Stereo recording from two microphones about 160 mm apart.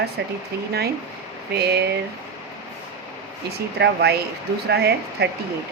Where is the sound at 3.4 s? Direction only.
90° right.